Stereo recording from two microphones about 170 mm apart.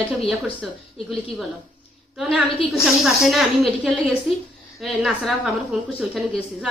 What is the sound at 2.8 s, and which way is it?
A woman's voice, centre (ahead or behind).